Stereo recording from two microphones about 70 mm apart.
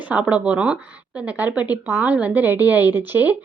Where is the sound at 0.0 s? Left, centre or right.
Centre.